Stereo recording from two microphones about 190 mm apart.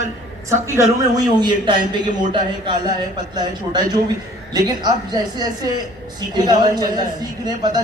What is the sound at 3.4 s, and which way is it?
Speech, 20° right (ahead or behind).